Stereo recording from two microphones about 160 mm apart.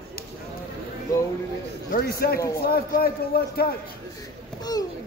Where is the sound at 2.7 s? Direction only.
70° left (ahead or behind).